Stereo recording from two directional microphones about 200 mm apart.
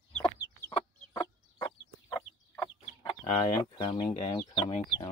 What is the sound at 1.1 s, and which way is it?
Chicken, 15° left (ahead or behind).